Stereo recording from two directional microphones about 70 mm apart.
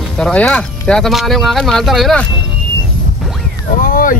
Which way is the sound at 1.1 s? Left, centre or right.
Centre.